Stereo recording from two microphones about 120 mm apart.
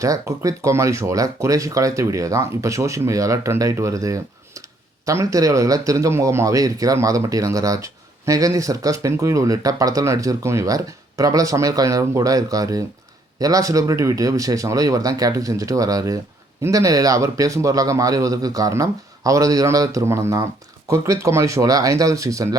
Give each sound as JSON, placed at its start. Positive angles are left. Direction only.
{"t": 0.0, "sound": "speech", "side_deg": -25}